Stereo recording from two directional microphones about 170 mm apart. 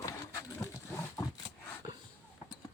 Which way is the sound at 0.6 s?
15° left (ahead or behind).